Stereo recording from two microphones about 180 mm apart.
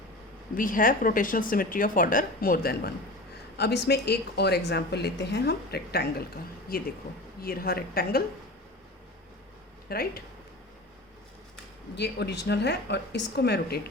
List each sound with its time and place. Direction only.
0.5 s speech: 50° left (ahead or behind)
9.9 s speech: 55° left (ahead or behind)
11.9 s a woman's voice: 65° left (ahead or behind)